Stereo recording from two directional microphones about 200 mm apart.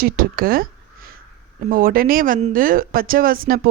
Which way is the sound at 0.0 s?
45° right (ahead or behind).